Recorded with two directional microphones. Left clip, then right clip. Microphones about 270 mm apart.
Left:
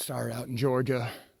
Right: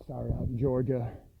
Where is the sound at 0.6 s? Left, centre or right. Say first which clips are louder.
Left 2 dB; centre.